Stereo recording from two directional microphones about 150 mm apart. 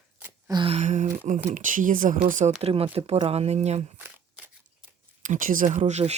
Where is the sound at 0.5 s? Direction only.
35° right (ahead or behind).